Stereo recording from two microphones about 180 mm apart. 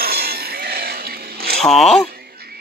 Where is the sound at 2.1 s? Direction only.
60° right (ahead or behind).